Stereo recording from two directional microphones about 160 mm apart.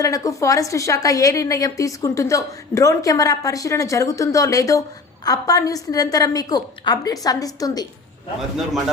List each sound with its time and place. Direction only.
0.0 s a woman's voice: 20° left (ahead or behind)